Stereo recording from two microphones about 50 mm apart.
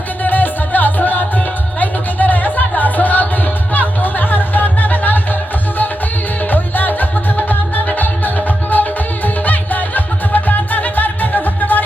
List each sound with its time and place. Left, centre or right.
0.2 s music: left
6.5 s music: left